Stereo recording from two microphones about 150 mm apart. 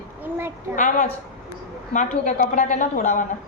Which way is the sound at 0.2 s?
15° right (ahead or behind).